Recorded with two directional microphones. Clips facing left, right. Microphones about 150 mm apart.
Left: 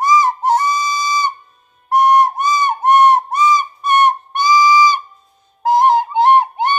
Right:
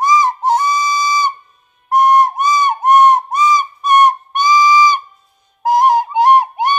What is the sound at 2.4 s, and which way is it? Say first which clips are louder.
Whistle: right 2 dB; 15° right (ahead or behind).